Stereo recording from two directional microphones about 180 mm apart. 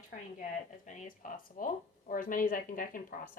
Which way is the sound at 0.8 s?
45° left (ahead or behind).